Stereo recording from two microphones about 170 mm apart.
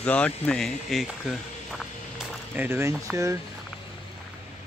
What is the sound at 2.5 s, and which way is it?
Speech, 15° right (ahead or behind).